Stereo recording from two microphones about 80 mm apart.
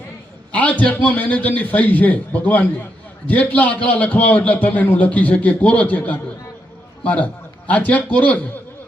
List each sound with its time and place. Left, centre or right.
0.5 s a man's voice: centre